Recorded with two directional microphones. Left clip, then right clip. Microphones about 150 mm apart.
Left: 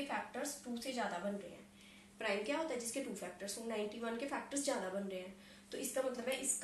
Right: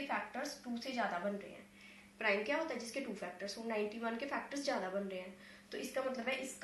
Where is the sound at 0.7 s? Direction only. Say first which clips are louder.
Even; 35° left (ahead or behind).